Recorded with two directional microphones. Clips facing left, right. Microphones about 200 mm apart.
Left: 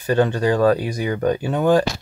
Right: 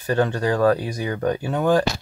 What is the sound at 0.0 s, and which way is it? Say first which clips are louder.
Speech: left 3 dB; 20° left (ahead or behind).